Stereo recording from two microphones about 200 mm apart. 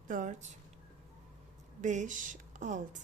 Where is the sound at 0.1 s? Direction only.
40° right (ahead or behind).